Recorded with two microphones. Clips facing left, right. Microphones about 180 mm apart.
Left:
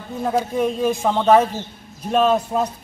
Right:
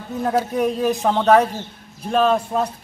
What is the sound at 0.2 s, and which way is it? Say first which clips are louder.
A man's voice: even; centre (ahead or behind).